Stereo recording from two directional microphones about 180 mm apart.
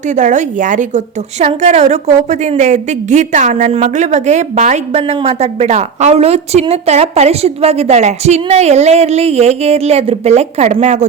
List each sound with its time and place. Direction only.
0.1 s a woman's voice: 40° right (ahead or behind)